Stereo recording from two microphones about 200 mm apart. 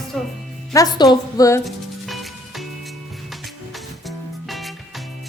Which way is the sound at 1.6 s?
Centre (ahead or behind).